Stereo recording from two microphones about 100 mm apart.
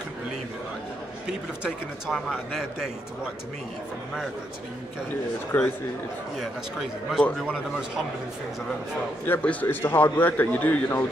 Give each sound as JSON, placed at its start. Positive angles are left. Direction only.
{"t": 1.2, "sound": "speech", "side_deg": -5}
{"t": 5.5, "sound": "a man's voice", "side_deg": 20}
{"t": 9.2, "sound": "a man's voice", "side_deg": 15}